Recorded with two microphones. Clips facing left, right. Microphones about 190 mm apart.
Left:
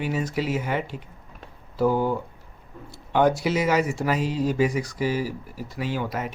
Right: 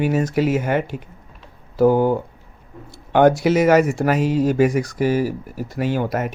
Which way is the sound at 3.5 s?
50° right (ahead or behind).